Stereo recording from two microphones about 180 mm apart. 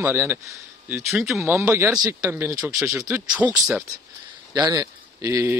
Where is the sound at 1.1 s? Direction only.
Centre (ahead or behind).